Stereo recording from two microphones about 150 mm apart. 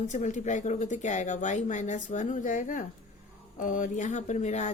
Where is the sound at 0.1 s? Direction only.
55° left (ahead or behind).